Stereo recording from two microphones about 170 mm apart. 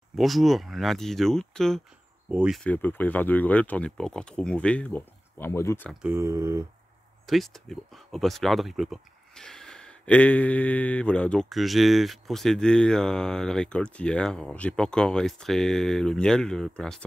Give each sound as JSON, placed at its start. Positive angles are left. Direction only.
{"t": 0.1, "sound": "speech", "side_deg": 0}
{"t": 2.6, "sound": "speech", "side_deg": 10}
{"t": 6.0, "sound": "speech", "side_deg": -15}
{"t": 7.2, "sound": "speech", "side_deg": 0}